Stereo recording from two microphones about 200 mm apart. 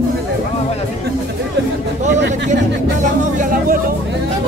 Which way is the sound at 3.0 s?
40° right (ahead or behind).